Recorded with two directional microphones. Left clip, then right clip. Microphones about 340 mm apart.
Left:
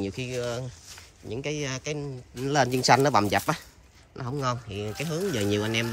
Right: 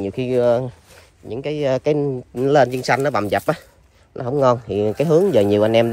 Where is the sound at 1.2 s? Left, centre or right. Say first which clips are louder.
Right 10 dB; centre.